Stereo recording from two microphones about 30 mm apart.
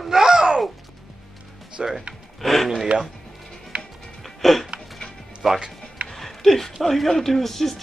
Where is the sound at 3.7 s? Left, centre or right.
Right.